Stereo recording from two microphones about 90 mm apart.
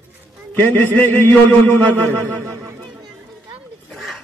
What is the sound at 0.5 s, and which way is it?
A man's voice, 20° left (ahead or behind).